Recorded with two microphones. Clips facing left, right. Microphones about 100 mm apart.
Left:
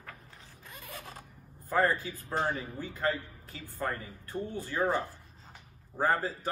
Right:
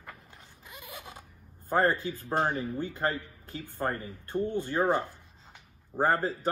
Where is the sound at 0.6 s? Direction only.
Centre (ahead or behind).